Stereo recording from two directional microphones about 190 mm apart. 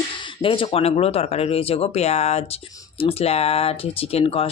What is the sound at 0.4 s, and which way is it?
Speech, 30° left (ahead or behind).